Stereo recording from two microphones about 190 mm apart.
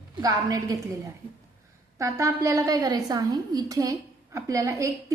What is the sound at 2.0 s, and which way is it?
A woman's voice, 15° right (ahead or behind).